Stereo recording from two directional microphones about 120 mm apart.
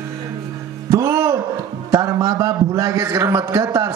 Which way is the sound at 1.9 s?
25° right (ahead or behind).